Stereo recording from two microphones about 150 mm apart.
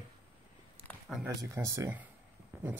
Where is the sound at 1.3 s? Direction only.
20° right (ahead or behind).